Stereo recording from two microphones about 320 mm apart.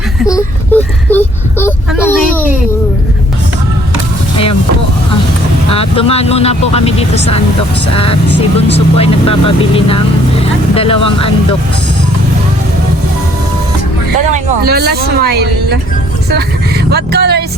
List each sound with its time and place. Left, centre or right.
0.3 s a child's voice: centre
5.7 s speech: centre
10.8 s speech: centre
14.3 s speech: right